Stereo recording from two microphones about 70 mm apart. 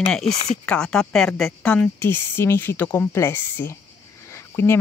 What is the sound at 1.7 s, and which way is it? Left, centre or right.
Speech, left.